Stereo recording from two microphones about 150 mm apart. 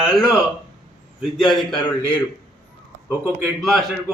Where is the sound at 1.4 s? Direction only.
Centre (ahead or behind).